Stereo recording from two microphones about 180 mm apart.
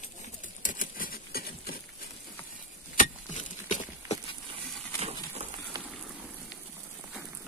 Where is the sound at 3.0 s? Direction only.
45° left (ahead or behind).